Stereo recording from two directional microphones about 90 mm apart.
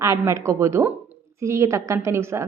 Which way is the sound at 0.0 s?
35° right (ahead or behind).